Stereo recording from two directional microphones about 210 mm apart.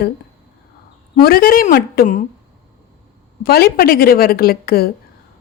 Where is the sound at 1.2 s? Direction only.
45° left (ahead or behind).